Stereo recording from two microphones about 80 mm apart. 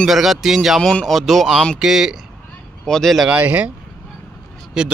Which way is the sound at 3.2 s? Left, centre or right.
Centre.